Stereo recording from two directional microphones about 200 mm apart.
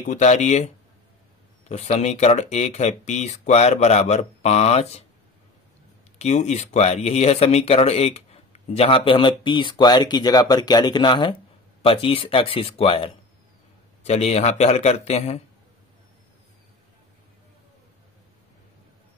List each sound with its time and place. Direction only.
0.1 s speech: 35° left (ahead or behind)
1.7 s speech: 35° left (ahead or behind)
6.1 s speech: 35° left (ahead or behind)